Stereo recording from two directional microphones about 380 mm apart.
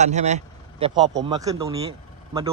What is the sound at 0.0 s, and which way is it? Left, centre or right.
Speech, centre.